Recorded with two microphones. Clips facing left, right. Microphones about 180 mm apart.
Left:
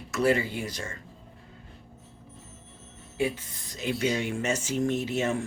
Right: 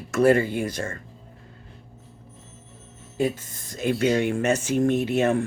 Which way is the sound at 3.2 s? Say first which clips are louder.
Right 4 dB; 45° right (ahead or behind).